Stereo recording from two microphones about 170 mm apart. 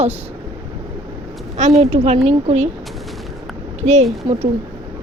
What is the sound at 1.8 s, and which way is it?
Speech, 40° right (ahead or behind).